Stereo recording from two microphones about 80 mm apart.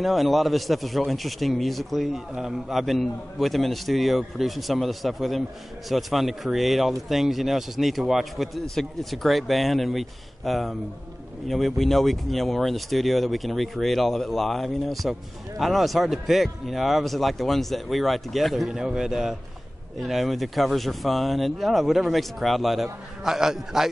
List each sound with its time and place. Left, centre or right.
0.0 s a man's voice: centre